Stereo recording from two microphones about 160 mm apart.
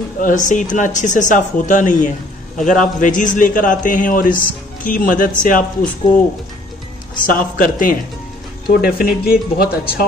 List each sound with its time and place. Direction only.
0.2 s a man's voice: 50° left (ahead or behind)
7.2 s a man's voice: 60° left (ahead or behind)